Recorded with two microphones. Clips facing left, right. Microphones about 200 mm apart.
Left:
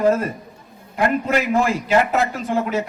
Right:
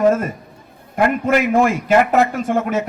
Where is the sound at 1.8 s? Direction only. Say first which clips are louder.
Right 4 dB; 50° right (ahead or behind).